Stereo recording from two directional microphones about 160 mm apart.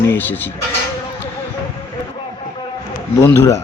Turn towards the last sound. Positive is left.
turn(degrees=15)  # may be behind; listen again after turning